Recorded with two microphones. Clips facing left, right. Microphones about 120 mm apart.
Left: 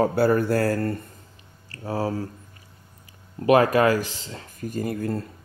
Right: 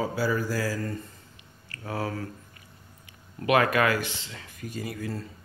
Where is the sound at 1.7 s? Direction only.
35° left (ahead or behind).